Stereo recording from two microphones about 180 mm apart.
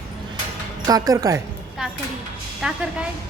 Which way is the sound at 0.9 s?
20° right (ahead or behind).